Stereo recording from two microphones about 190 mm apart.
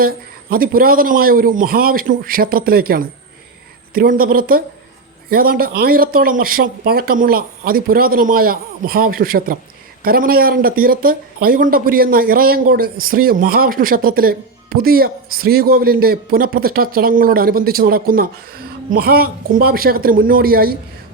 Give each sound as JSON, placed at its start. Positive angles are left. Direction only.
{"t": 0.5, "sound": "speech", "side_deg": -50}